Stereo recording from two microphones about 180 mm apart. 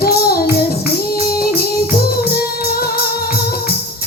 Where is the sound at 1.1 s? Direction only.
60° left (ahead or behind).